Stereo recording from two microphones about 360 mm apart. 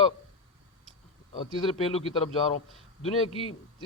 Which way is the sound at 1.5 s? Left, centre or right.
Centre.